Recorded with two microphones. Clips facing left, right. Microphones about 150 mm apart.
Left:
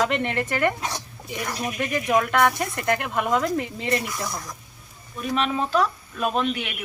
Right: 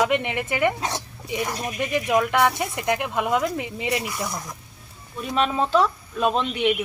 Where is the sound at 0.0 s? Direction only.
15° right (ahead or behind).